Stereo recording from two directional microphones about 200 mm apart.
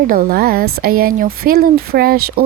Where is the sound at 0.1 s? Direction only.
45° right (ahead or behind).